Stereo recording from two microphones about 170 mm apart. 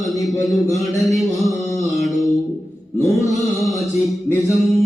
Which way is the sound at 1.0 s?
Centre (ahead or behind).